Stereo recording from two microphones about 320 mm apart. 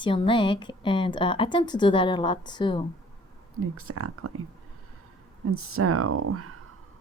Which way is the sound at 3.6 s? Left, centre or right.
Right.